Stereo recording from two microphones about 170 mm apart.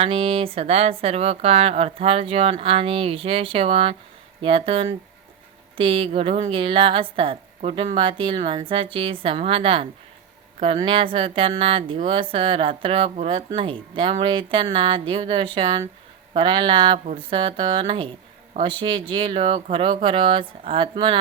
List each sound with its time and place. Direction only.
0.0 s a woman's voice: 35° right (ahead or behind)